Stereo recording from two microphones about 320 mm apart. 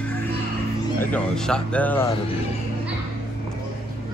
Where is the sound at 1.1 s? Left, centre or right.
Centre.